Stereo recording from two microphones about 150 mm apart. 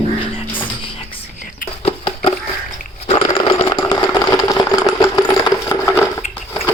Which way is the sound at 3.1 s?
30° left (ahead or behind).